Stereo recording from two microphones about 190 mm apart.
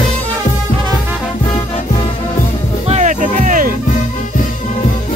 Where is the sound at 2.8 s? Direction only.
35° right (ahead or behind).